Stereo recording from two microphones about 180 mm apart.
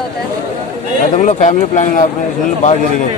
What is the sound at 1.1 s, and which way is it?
Speech, 40° left (ahead or behind).